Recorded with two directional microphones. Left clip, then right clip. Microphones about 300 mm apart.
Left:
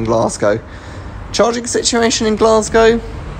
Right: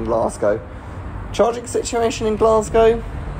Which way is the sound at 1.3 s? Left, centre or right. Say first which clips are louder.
Left 4 dB; left.